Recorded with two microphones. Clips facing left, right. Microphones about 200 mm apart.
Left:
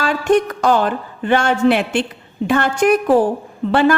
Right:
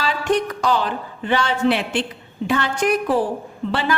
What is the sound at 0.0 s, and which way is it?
A woman's voice, 50° left (ahead or behind).